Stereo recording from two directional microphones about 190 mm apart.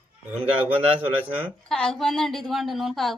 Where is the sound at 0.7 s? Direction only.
30° right (ahead or behind).